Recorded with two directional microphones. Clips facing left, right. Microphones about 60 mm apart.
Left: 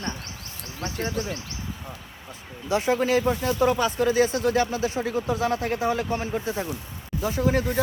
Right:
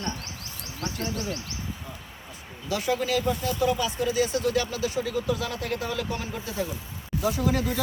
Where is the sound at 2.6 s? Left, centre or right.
Left.